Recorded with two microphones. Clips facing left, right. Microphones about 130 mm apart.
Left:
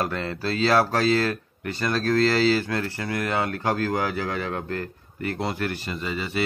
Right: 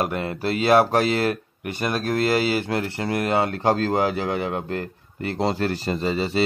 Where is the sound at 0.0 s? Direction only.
15° right (ahead or behind).